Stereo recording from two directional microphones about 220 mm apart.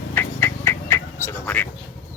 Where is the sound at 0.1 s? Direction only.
10° left (ahead or behind).